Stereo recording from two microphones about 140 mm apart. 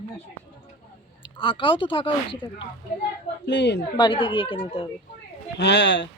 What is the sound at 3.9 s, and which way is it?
Speech, 35° left (ahead or behind).